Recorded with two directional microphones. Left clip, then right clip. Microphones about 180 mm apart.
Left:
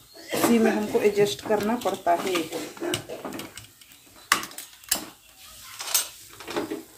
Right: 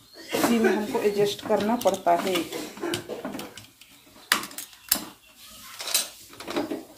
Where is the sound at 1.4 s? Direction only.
5° left (ahead or behind).